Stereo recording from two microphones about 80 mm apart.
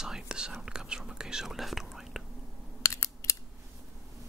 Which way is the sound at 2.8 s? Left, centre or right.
Left.